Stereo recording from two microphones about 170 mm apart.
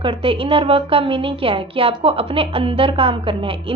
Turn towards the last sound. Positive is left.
turn(degrees=-30)  # may be behind; listen again after turning